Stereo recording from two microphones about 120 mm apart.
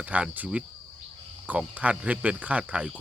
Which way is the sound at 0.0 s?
10° right (ahead or behind).